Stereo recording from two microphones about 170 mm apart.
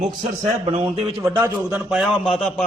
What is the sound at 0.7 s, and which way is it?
Speech, 35° right (ahead or behind).